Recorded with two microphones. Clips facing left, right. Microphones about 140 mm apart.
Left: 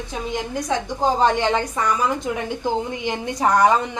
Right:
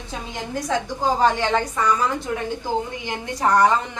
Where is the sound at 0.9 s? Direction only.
20° left (ahead or behind).